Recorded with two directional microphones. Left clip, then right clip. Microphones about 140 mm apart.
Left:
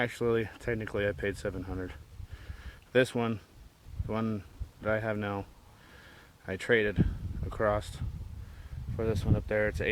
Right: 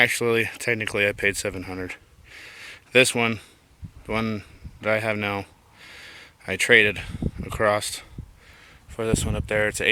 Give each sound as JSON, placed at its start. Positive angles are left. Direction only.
{"t": 0.0, "sound": "speech", "side_deg": -15}
{"t": 1.5, "sound": "speech", "side_deg": -35}
{"t": 2.9, "sound": "speech", "side_deg": -20}